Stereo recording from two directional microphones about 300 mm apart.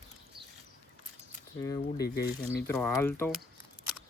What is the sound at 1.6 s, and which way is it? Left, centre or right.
Speech, centre.